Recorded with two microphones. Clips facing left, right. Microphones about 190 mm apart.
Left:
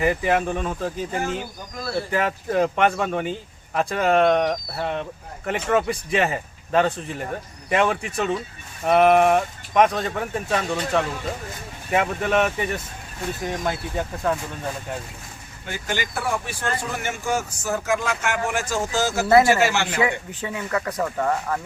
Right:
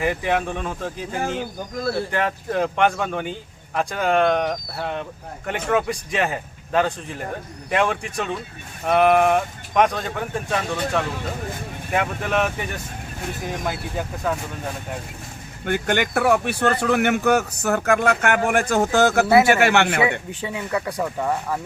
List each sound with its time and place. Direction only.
0.0 s speech: centre (ahead or behind)
15.6 s speech: 60° right (ahead or behind)
20.1 s speech: 15° right (ahead or behind)